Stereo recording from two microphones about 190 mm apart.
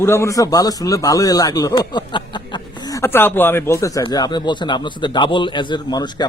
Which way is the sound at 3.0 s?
10° left (ahead or behind).